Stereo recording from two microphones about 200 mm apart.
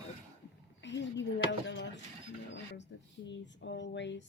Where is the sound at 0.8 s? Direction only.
60° left (ahead or behind).